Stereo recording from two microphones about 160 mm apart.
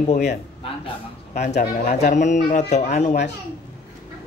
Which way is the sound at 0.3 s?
35° left (ahead or behind).